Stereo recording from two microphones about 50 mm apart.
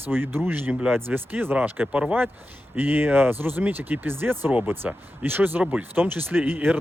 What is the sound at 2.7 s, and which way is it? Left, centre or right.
Speech, right.